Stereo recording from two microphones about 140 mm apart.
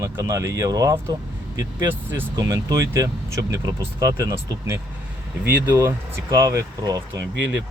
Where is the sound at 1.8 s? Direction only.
15° right (ahead or behind).